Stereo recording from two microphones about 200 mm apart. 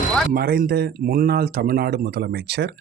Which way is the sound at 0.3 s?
50° right (ahead or behind).